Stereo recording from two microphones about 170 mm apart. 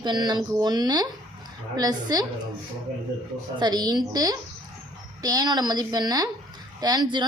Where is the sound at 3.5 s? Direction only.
25° right (ahead or behind).